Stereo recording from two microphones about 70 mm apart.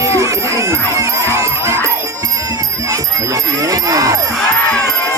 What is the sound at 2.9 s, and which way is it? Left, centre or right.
Music, right.